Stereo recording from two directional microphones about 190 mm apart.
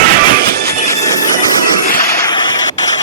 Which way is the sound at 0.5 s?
55° right (ahead or behind).